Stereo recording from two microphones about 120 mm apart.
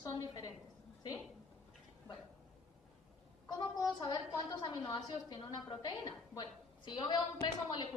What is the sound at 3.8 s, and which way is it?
A woman's voice, 35° left (ahead or behind).